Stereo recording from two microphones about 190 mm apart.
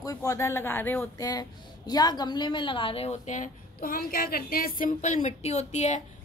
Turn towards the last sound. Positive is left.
turn(degrees=40)  # may be behind; listen again after turning